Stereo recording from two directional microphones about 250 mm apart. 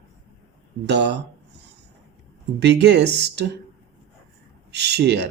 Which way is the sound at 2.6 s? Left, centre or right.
Right.